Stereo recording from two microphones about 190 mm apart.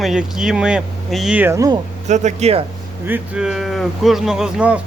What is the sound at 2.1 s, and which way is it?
Speech, 40° right (ahead or behind).